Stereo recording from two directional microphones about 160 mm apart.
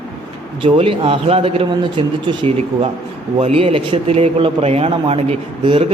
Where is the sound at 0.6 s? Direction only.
35° right (ahead or behind).